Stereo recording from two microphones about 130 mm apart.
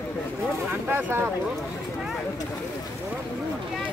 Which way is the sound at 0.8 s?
15° right (ahead or behind).